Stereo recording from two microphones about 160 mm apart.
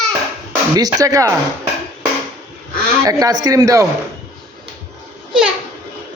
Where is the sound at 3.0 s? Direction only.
25° right (ahead or behind).